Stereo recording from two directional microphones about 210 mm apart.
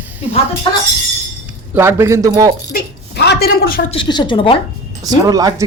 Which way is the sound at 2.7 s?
50° left (ahead or behind).